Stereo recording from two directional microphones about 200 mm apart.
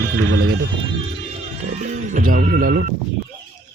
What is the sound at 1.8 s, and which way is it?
Music, 35° right (ahead or behind).